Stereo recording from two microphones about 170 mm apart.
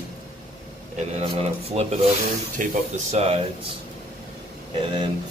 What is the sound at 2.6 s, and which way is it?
Speech, 50° right (ahead or behind).